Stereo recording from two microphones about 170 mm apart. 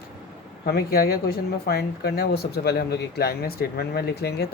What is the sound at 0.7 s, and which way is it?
Speech, 65° left (ahead or behind).